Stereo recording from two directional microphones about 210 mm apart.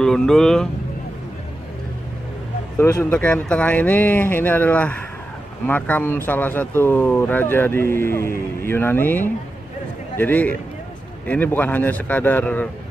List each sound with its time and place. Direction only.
0.0 s speech: 5° left (ahead or behind)
2.8 s speech: 10° left (ahead or behind)